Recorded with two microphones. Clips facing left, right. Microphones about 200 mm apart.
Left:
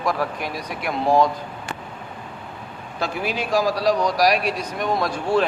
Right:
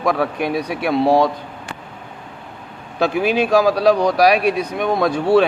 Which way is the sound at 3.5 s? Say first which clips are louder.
Right 4 dB; 60° right (ahead or behind).